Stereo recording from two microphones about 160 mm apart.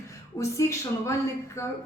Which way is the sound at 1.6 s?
20° left (ahead or behind).